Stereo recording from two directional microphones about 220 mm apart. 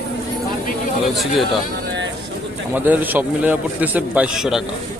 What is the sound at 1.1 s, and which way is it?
Speech, centre (ahead or behind).